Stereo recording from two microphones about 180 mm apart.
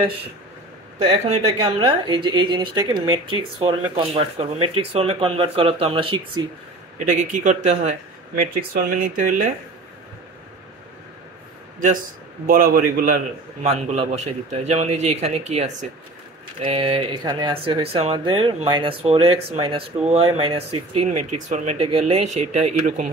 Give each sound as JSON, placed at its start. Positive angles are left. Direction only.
{"t": 1.2, "sound": "speech", "side_deg": -35}
{"t": 7.0, "sound": "speech", "side_deg": -45}
{"t": 12.4, "sound": "speech", "side_deg": -55}
{"t": 21.1, "sound": "speech", "side_deg": -40}